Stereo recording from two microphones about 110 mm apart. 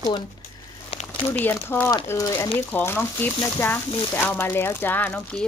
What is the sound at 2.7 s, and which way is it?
Speech, 20° left (ahead or behind).